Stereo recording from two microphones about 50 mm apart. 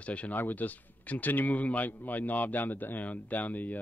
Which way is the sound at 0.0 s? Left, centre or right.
Left.